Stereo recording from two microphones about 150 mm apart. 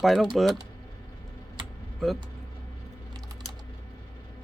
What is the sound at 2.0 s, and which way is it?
Speech, centre (ahead or behind).